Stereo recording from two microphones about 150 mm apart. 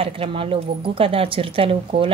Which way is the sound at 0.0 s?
40° right (ahead or behind).